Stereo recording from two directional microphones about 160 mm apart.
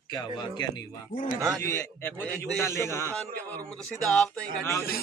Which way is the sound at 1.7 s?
15° left (ahead or behind).